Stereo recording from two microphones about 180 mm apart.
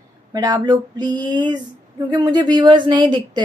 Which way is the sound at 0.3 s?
20° right (ahead or behind).